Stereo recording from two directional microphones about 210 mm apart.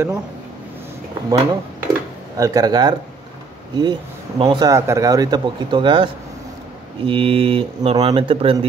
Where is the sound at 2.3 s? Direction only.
15° right (ahead or behind).